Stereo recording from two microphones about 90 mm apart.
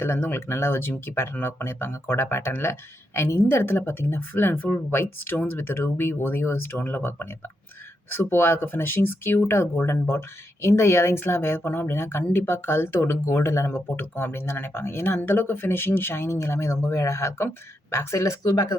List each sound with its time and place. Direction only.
0.0 s speech: 25° left (ahead or behind); by 18.8 s 45° left (ahead or behind)